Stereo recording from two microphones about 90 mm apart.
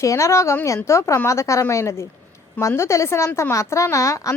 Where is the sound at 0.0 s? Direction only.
35° left (ahead or behind).